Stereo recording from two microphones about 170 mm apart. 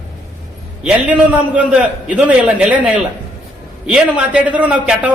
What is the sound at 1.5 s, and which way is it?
A man's voice, 10° right (ahead or behind).